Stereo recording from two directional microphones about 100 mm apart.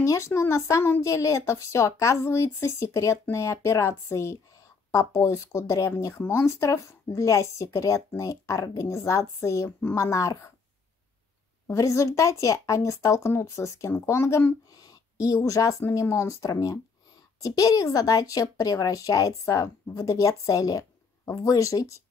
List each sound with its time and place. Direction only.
0.0 s speech: 30° left (ahead or behind)
11.6 s speech: 30° left (ahead or behind)